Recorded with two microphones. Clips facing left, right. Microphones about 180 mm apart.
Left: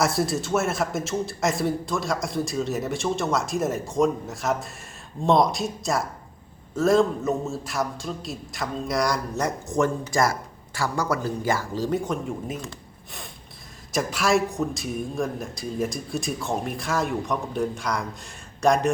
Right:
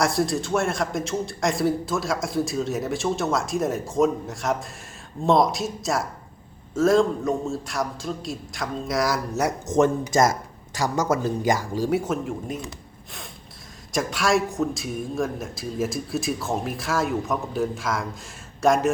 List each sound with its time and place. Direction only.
0.0 s a man's voice: centre (ahead or behind)
9.6 s speech: 20° right (ahead or behind)
13.9 s a man's voice: centre (ahead or behind)